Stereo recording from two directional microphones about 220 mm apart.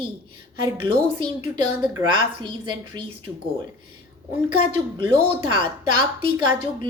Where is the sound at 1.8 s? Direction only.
10° right (ahead or behind).